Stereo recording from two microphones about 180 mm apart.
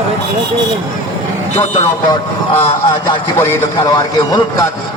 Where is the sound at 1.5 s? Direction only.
35° left (ahead or behind).